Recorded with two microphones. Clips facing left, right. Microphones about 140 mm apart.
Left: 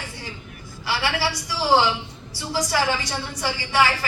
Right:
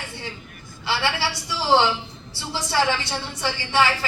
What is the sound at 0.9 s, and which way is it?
A woman's voice, 25° right (ahead or behind).